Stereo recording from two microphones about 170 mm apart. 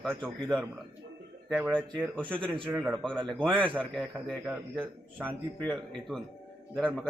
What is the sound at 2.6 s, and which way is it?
Speech, 5° right (ahead or behind).